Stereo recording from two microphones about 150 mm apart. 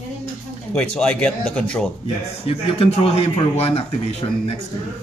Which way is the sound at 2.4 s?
40° left (ahead or behind).